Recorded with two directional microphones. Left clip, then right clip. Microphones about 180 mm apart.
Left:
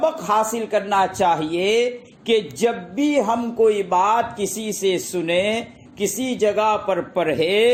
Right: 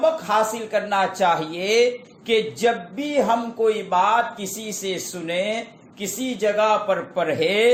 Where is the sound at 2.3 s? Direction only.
40° left (ahead or behind).